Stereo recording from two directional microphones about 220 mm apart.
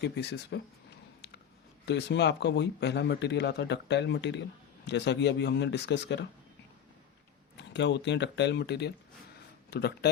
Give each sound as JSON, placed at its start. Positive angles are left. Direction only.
{"t": 0.0, "sound": "speech", "side_deg": 50}
{"t": 1.8, "sound": "speech", "side_deg": 50}
{"t": 7.5, "sound": "speech", "side_deg": 50}